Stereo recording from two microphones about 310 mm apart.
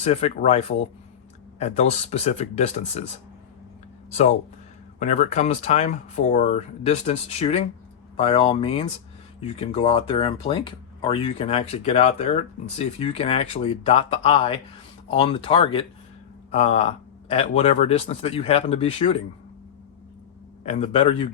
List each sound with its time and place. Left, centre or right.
0.0 s speech: centre
4.1 s speech: left
20.7 s speech: centre